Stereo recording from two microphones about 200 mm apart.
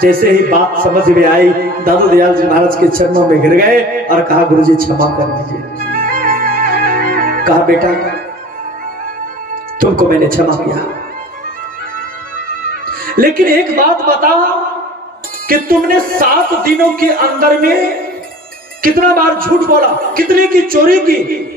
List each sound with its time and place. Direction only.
0.0 s a man's voice: 45° right (ahead or behind)
5.8 s music: 45° right (ahead or behind)
9.8 s a man's voice: 45° right (ahead or behind)
12.8 s a woman's voice: 45° right (ahead or behind)
15.4 s a man's voice: 45° right (ahead or behind)